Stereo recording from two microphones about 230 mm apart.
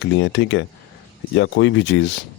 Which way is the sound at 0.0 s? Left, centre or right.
Left.